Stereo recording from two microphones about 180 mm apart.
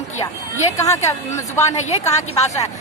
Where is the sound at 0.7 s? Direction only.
15° left (ahead or behind).